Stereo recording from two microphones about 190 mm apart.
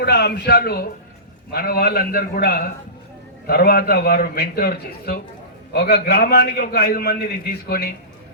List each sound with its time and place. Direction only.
0.0 s a man's voice: 60° left (ahead or behind)